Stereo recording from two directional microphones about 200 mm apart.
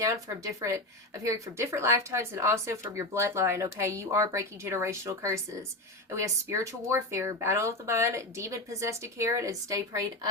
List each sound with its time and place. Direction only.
0.0 s speech: 15° right (ahead or behind)